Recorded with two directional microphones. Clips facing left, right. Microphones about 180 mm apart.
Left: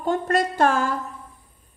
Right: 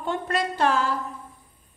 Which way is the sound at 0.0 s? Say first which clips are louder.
Left 5 dB; 45° left (ahead or behind).